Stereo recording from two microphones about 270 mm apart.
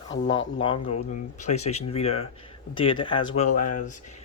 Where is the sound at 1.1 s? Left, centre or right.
Left.